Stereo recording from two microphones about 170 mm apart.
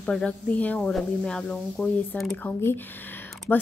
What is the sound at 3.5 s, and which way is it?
Speech, 10° left (ahead or behind).